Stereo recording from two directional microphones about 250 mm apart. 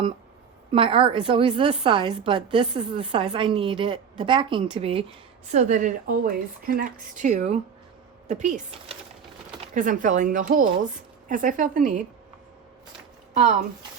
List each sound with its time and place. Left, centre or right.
0.7 s a woman's voice: right